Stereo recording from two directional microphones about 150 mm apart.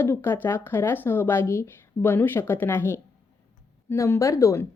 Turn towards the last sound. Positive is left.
turn(degrees=20)  # may be behind; listen again after turning